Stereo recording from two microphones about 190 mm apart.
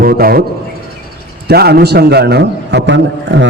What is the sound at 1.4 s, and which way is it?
A man's voice, 55° right (ahead or behind).